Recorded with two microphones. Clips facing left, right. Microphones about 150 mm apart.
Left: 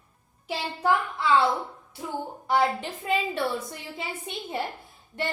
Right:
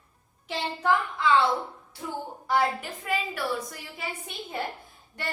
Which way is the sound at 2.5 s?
25° left (ahead or behind).